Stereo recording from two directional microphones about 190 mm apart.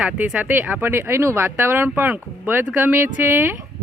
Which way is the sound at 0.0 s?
5° right (ahead or behind).